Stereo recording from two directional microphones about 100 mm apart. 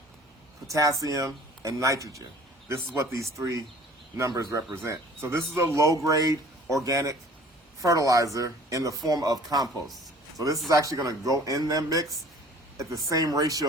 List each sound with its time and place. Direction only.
0.7 s speech: 35° right (ahead or behind)
9.6 s speech: centre (ahead or behind)
10.3 s a man's voice: 35° right (ahead or behind)